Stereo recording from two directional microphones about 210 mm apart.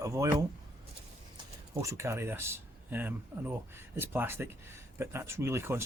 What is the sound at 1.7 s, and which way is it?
Speech, 15° right (ahead or behind).